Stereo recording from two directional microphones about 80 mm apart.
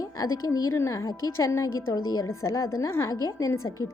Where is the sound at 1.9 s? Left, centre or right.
Left.